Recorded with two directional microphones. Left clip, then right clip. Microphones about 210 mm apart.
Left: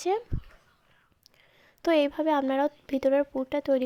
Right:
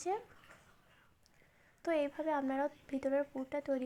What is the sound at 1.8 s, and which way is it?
A woman's voice, 40° left (ahead or behind).